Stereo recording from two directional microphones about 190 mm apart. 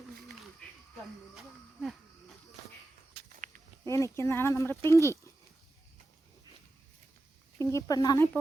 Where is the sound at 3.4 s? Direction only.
40° right (ahead or behind).